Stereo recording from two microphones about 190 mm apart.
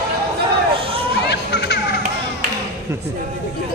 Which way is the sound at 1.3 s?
60° left (ahead or behind).